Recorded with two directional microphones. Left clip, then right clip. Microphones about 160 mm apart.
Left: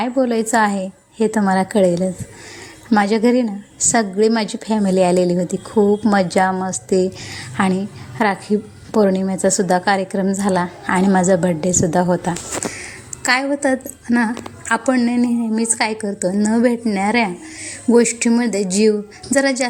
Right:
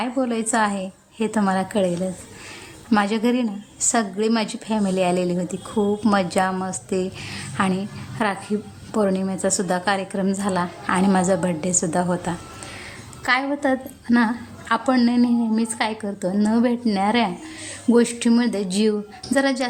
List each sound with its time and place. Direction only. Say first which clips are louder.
0.0 s a woman's voice: left 6 dB; 20° left (ahead or behind)
14.8 s a woman's voice: even; centre (ahead or behind)